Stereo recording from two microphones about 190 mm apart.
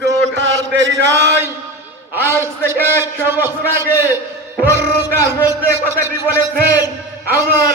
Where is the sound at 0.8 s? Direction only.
70° right (ahead or behind).